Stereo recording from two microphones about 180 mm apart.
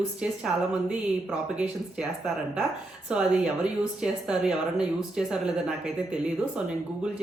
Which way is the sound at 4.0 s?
5° right (ahead or behind).